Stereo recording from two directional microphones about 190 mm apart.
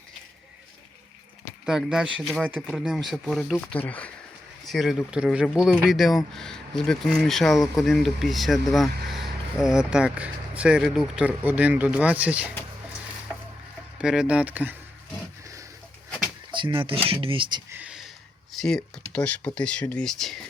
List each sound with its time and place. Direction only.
1.6 s speech: 5° right (ahead or behind)
14.0 s speech: 5° right (ahead or behind)
16.5 s speech: 25° right (ahead or behind)
17.7 s a sound: 5° right (ahead or behind)
18.6 s speech: 5° left (ahead or behind)